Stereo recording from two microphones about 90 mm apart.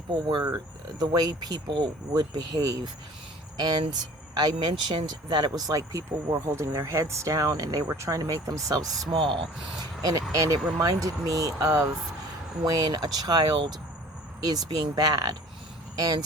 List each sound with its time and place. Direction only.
0.1 s speech: 60° right (ahead or behind)
0.4 s speech: 45° right (ahead or behind)
9.1 s speech: 65° right (ahead or behind)
10.0 s speech: 45° right (ahead or behind)